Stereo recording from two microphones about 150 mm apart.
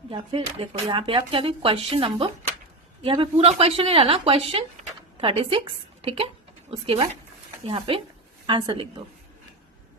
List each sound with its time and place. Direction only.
0.1 s a woman's voice: 35° right (ahead or behind)